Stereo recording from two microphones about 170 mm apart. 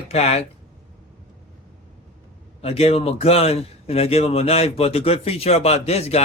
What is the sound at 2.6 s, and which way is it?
A man's voice, 35° left (ahead or behind).